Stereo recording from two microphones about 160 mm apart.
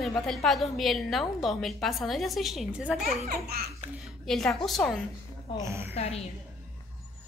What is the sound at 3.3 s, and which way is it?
Speech, 80° right.